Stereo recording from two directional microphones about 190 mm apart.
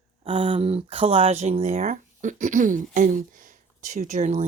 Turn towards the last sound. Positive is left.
turn(degrees=-40)  # may be behind; listen again after turning